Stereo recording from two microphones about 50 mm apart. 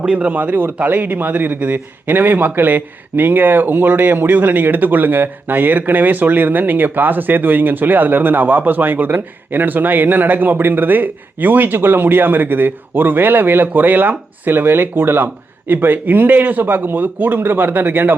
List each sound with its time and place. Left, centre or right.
0.0 s speech: right